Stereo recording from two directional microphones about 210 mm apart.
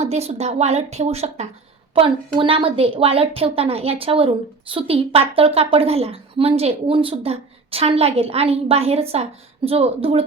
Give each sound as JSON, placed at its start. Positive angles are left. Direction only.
{"t": 0.0, "sound": "a woman's voice", "side_deg": -30}